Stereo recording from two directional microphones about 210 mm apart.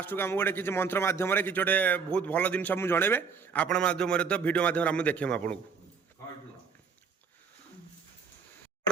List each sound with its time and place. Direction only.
0.0 s a man's voice: 10° left (ahead or behind)